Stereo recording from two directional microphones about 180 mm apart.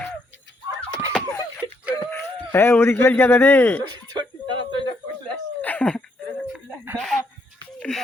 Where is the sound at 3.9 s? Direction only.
25° right (ahead or behind).